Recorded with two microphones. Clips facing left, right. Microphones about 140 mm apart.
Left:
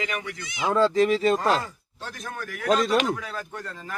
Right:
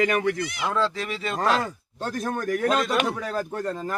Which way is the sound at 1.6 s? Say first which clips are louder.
Right 7 dB; 50° right (ahead or behind).